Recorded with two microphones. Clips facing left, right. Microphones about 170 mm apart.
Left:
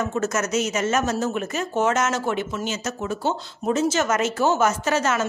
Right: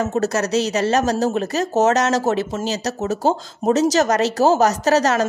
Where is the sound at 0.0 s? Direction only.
35° right (ahead or behind).